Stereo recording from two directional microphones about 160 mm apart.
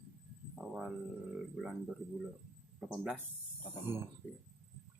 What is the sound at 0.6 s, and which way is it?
Speech, centre (ahead or behind).